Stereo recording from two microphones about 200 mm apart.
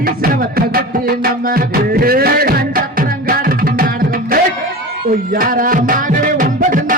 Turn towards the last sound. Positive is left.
turn(degrees=-45)  # may be behind; listen again after turning